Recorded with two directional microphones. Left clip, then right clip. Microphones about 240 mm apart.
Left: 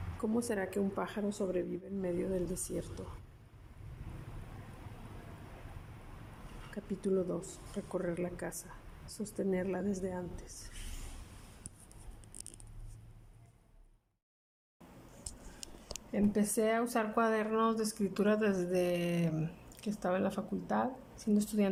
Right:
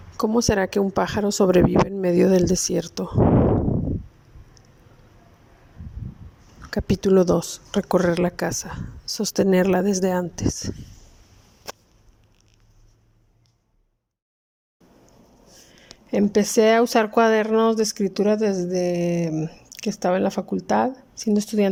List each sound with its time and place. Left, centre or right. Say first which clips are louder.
0.2 s speech: right 15 dB; right
6.7 s speech: right 16 dB; right
16.1 s speech: right 15 dB; right